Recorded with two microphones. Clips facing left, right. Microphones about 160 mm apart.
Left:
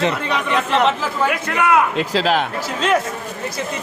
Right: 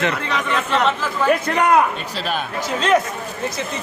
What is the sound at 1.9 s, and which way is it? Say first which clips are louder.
Speech: left 7 dB; 90° left.